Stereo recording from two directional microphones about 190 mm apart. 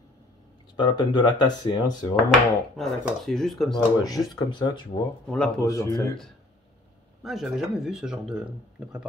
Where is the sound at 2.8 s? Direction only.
Centre (ahead or behind).